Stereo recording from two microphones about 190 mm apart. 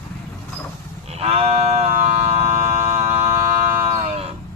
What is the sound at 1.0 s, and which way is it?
Sheep, 35° right (ahead or behind).